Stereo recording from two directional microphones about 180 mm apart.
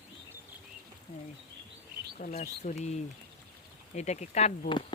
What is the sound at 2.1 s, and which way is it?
Speech, 45° left (ahead or behind).